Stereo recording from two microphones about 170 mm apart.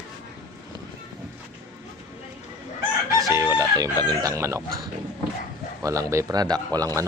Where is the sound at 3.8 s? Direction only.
20° right (ahead or behind).